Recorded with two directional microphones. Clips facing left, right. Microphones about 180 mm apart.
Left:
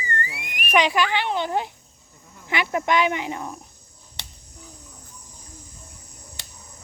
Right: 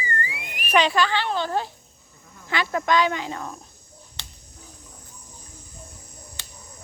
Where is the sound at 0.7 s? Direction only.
15° left (ahead or behind).